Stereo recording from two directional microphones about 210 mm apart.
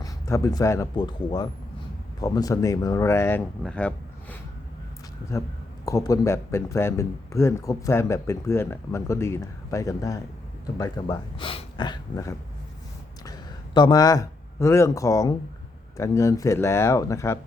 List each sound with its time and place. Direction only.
0.0 s speech: 15° left (ahead or behind)
5.8 s speech: 15° left (ahead or behind)
13.7 s speech: 20° left (ahead or behind)